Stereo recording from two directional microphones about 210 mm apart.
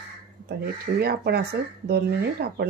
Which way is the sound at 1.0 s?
50° right (ahead or behind).